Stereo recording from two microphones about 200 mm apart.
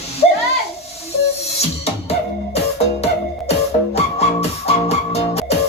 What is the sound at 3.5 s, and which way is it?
Music, 30° left (ahead or behind).